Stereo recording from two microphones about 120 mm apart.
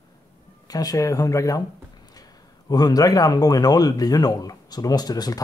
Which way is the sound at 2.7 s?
35° left (ahead or behind).